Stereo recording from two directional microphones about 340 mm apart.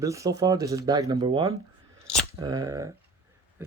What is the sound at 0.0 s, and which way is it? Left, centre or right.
Speech, centre.